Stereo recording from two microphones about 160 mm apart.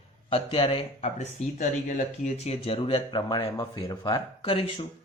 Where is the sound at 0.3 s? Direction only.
35° left (ahead or behind).